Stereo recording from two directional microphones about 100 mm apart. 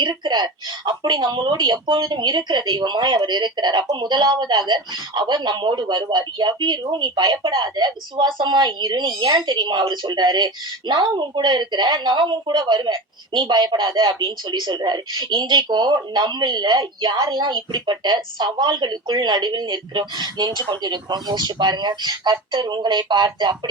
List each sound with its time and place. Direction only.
0.0 s a woman's voice: 45° right (ahead or behind)